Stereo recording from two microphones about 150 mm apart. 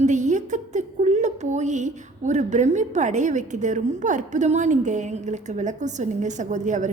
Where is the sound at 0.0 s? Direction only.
55° right (ahead or behind).